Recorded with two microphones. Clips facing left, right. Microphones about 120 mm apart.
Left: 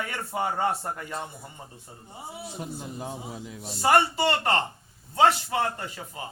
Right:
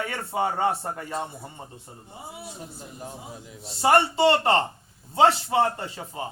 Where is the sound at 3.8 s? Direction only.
25° right (ahead or behind).